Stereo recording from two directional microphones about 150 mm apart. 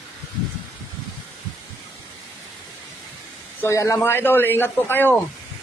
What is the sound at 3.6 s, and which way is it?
Speech, 20° left (ahead or behind).